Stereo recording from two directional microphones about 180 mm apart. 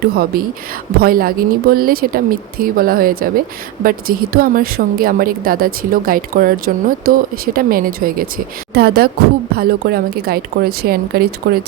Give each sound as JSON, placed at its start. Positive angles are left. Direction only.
{"t": 0.3, "sound": "a woman's voice", "side_deg": -55}